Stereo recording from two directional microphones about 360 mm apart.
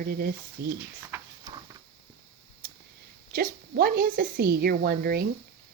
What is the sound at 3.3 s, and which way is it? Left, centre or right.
Speech, right.